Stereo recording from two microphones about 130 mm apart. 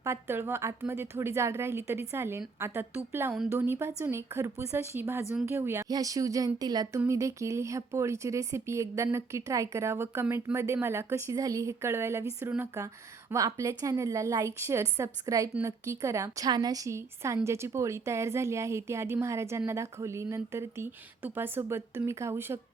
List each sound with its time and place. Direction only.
0.0 s a woman's voice: 20° right (ahead or behind)